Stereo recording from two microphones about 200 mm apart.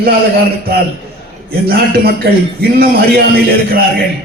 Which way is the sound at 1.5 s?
50° right (ahead or behind).